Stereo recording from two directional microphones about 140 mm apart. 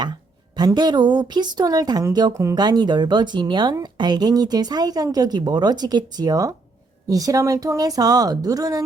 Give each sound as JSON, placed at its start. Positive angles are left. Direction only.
{"t": 0.5, "sound": "speech", "side_deg": -30}